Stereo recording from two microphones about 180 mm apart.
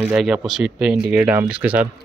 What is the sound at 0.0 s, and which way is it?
Speech, 5° right (ahead or behind).